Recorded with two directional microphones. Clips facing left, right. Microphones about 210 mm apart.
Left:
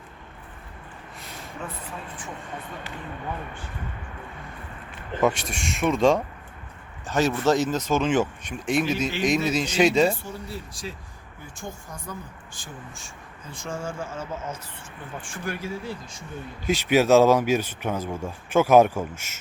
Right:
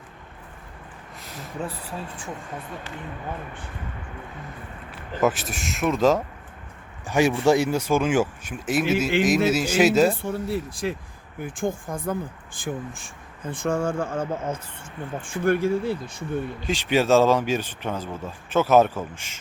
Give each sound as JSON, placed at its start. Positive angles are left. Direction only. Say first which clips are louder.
{"t": 1.2, "sound": "a sound", "louder": "right 3 dB", "side_deg": 0}
{"t": 5.2, "sound": "speech", "louder": "even", "side_deg": -5}
{"t": 7.1, "sound": "speech", "louder": "right 3 dB", "side_deg": -15}
{"t": 10.2, "sound": "speech", "louder": "right 9 dB", "side_deg": -60}
{"t": 15.3, "sound": "speech", "louder": "right 11 dB", "side_deg": -55}
{"t": 16.6, "sound": "speech", "louder": "left 3 dB", "side_deg": 10}